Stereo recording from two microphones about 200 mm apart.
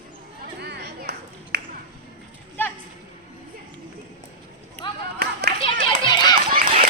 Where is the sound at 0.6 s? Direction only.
55° right (ahead or behind).